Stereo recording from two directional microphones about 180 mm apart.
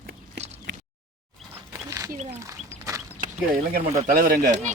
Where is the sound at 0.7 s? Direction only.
85° right.